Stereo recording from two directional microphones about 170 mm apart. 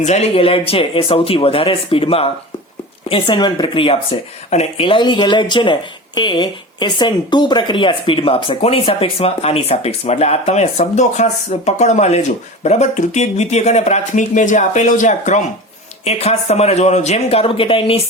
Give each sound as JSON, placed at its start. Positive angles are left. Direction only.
{"t": 0.0, "sound": "speech", "side_deg": 40}